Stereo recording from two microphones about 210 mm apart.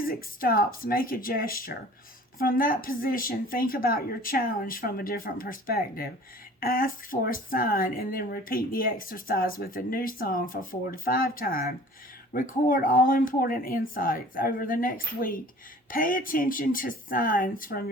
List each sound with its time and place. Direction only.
0.0 s speech: 45° left (ahead or behind)